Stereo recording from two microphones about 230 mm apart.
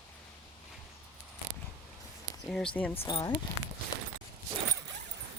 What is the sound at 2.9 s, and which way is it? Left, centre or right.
Speech, left.